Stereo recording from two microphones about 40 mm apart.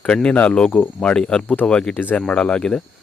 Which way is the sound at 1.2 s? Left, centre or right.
Centre.